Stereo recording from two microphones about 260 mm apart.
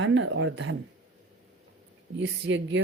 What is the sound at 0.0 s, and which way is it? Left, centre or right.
Speech, right.